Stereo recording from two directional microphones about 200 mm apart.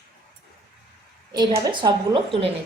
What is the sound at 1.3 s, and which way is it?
A woman's voice, 20° right (ahead or behind).